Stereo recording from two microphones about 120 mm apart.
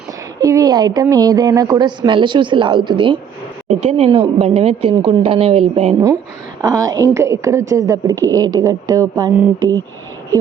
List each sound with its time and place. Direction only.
0.3 s a woman's voice: 30° right (ahead or behind)
3.8 s a woman's voice: 55° right (ahead or behind)
6.6 s a woman's voice: 30° right (ahead or behind)